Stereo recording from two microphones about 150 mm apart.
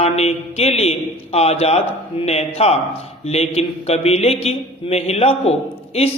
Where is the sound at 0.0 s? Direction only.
45° left (ahead or behind).